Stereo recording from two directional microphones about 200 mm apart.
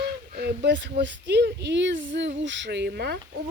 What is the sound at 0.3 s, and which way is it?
Speech, 55° right (ahead or behind).